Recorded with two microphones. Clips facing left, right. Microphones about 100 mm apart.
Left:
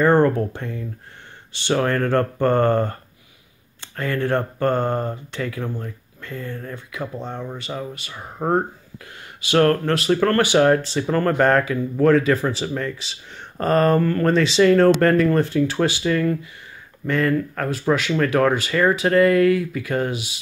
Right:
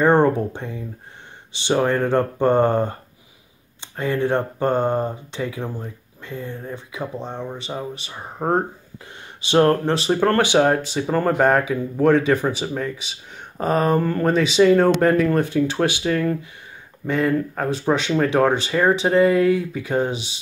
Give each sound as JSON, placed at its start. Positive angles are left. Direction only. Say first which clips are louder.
{"t": 0.0, "sound": "a sound", "louder": "even", "side_deg": -20}
{"t": 0.5, "sound": "speech", "louder": "even", "side_deg": -15}
{"t": 15.4, "sound": "speech", "louder": "even", "side_deg": -15}